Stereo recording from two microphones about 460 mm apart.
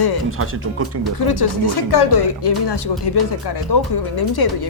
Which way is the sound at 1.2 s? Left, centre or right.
Left.